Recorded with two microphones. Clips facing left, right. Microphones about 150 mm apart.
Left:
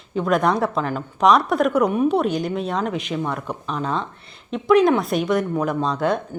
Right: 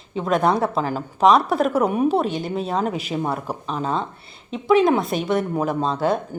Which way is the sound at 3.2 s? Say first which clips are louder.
Right 1 dB; 35° right (ahead or behind).